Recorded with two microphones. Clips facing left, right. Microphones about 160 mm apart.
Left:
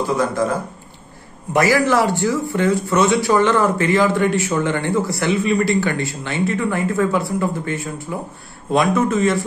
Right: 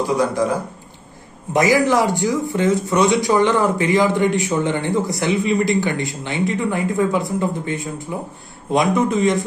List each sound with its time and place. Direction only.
0.0 s a man's voice: 15° right (ahead or behind)